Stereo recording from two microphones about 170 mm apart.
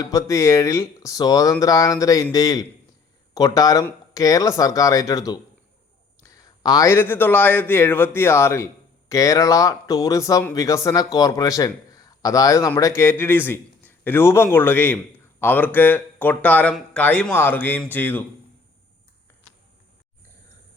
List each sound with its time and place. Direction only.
0.0 s a man's voice: 20° left (ahead or behind)